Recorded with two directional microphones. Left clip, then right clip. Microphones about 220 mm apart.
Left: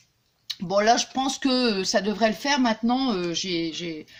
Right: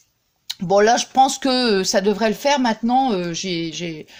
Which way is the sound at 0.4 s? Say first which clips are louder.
Right 5 dB; 40° right (ahead or behind).